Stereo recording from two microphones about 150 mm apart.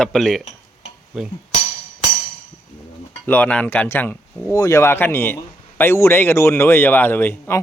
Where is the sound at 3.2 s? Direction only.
10° left (ahead or behind).